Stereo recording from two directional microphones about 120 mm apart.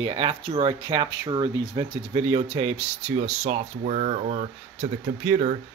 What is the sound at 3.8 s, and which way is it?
Speech, 70° right (ahead or behind).